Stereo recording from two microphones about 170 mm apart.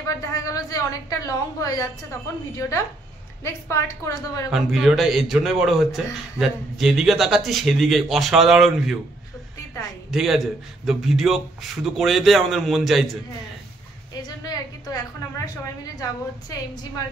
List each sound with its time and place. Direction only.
0.3 s a woman's voice: 20° left (ahead or behind)
4.5 s a man's voice: centre (ahead or behind)
10.1 s a man's voice: centre (ahead or behind)
14.2 s a woman's voice: 20° left (ahead or behind)